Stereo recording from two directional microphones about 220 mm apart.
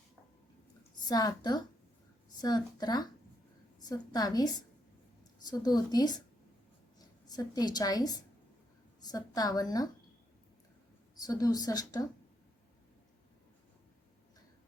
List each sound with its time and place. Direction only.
1.0 s a woman's voice: 15° left (ahead or behind)
5.5 s a woman's voice: 15° left (ahead or behind)
7.3 s a woman's voice: 15° left (ahead or behind)
11.2 s a woman's voice: 15° left (ahead or behind)